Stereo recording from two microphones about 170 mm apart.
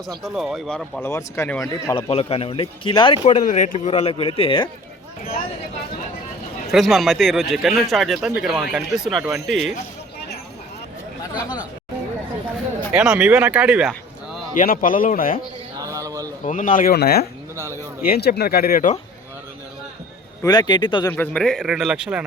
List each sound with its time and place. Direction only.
0.2 s speech: centre (ahead or behind)
1.0 s speech: 15° left (ahead or behind)
2.0 s speech: 35° left (ahead or behind)
3.2 s speech: 45° left (ahead or behind)
6.7 s speech: centre (ahead or behind)
12.9 s speech: 5° right (ahead or behind)
14.5 s a man's voice: 50° left (ahead or behind)
15.8 s a sound: 20° right (ahead or behind)
16.4 s a man's voice: 50° left (ahead or behind)
20.4 s speech: 25° left (ahead or behind)
21.1 s speech: 10° left (ahead or behind)